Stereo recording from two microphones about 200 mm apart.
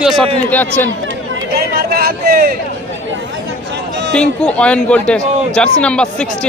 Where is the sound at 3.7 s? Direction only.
60° right (ahead or behind).